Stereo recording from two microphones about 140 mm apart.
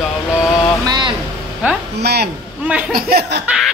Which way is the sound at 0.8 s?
30° right (ahead or behind).